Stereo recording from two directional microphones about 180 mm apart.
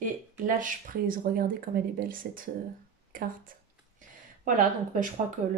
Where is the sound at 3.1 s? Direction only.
50° right (ahead or behind).